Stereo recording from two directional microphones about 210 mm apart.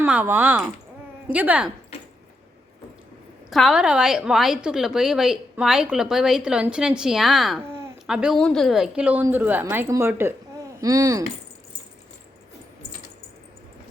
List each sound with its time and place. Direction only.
0.0 s a woman's voice: 10° right (ahead or behind)
3.5 s a woman's voice: centre (ahead or behind)
7.7 s a sound: 10° right (ahead or behind)
8.0 s a woman's voice: centre (ahead or behind)